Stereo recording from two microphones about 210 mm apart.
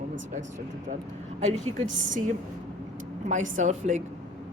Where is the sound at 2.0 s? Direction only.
35° right (ahead or behind).